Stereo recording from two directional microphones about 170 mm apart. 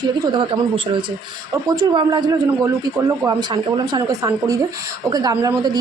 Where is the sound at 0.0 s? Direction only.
25° right (ahead or behind).